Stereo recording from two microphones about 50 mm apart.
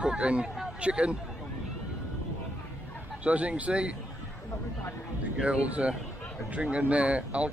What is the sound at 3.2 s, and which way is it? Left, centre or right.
Speech, right.